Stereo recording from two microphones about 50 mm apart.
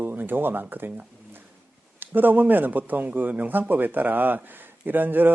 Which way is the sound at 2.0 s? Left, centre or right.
Right.